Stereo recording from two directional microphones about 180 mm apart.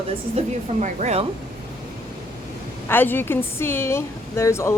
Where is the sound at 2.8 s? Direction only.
10° left (ahead or behind).